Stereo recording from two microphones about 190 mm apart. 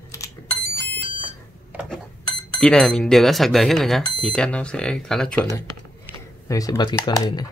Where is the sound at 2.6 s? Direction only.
5° left (ahead or behind).